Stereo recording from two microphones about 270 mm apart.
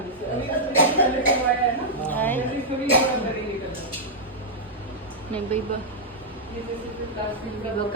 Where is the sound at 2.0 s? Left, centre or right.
Centre.